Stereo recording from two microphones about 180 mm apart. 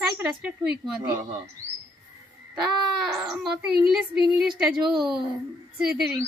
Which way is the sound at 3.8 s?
5° right (ahead or behind).